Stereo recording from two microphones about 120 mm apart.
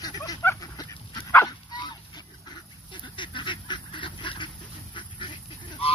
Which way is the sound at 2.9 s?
40° left (ahead or behind).